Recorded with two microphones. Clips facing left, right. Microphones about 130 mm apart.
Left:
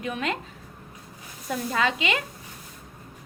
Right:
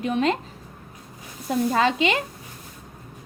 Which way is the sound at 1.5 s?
30° right (ahead or behind).